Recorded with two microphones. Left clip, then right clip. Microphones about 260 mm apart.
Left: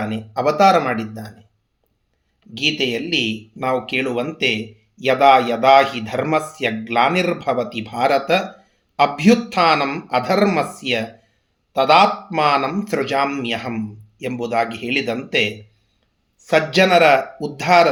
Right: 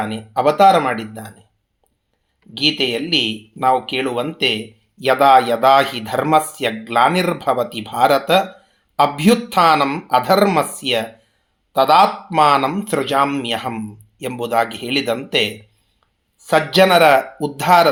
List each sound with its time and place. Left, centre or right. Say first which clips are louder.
0.0 s speech: right 3 dB; right
2.6 s speech: right 2 dB; right